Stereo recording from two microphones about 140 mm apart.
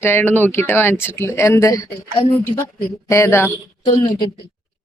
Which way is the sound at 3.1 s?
20° left (ahead or behind).